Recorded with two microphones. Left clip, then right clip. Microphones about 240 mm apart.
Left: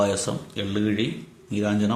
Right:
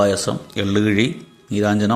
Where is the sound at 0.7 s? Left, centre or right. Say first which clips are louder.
Right 8 dB; right.